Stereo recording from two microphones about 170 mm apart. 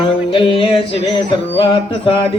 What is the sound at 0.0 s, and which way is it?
Music, 35° left (ahead or behind).